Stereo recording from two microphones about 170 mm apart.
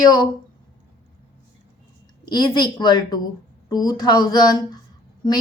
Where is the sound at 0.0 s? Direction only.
25° left (ahead or behind).